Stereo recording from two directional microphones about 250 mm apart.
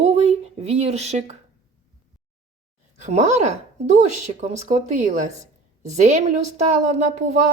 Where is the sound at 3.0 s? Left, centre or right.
Right.